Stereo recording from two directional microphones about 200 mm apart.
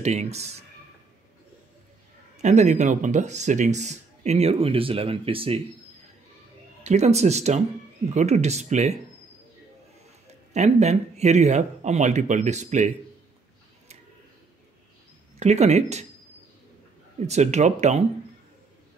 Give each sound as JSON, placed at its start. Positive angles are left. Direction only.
{"t": 0.0, "sound": "speech", "side_deg": -35}
{"t": 2.3, "sound": "speech", "side_deg": -35}
{"t": 6.8, "sound": "speech", "side_deg": -35}
{"t": 10.2, "sound": "speech", "side_deg": -35}
{"t": 15.3, "sound": "speech", "side_deg": -35}
{"t": 17.3, "sound": "speech", "side_deg": -35}